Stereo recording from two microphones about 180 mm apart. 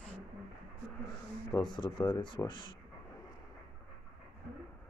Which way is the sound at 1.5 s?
25° left (ahead or behind).